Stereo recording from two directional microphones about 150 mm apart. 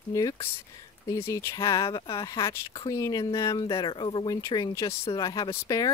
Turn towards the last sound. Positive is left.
turn(degrees=25)  # may be behind; listen again after turning